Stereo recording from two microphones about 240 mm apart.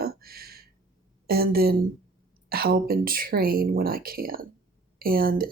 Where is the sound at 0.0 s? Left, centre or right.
Right.